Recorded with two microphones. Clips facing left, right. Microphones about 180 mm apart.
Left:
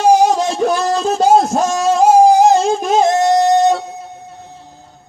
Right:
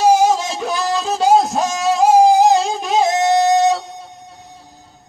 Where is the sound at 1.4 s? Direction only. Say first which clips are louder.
Left 3 dB; centre (ahead or behind).